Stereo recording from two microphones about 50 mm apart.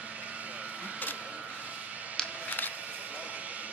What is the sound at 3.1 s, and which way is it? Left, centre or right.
Vehicle, right.